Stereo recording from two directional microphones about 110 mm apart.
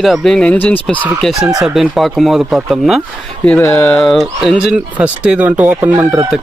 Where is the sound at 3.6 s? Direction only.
25° left (ahead or behind).